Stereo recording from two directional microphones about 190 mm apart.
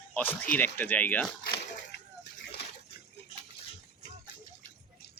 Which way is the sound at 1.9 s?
60° left (ahead or behind).